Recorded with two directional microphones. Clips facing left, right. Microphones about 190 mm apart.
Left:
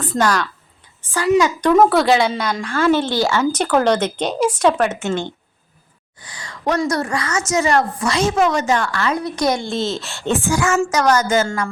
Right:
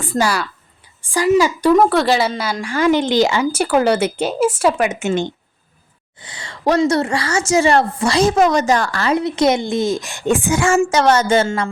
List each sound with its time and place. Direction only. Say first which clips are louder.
0.0 s a woman's voice: even; 10° right (ahead or behind)
10.6 s a woman's voice: right 3 dB; 25° right (ahead or behind)